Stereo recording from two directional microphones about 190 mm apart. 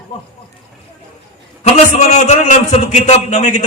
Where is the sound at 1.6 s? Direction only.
40° left (ahead or behind).